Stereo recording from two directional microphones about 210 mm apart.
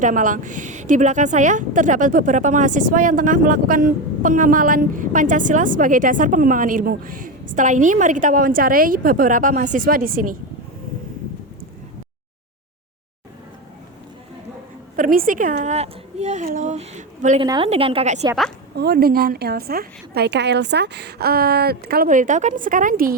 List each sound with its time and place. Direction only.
0.0 s a woman's voice: 40° right (ahead or behind)
14.9 s a woman's voice: 40° right (ahead or behind)
17.4 s a woman's voice: 20° right (ahead or behind)
18.8 s a woman's voice: 45° right (ahead or behind)